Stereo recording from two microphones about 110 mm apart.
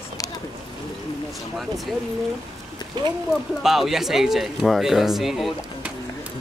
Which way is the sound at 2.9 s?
40° right (ahead or behind).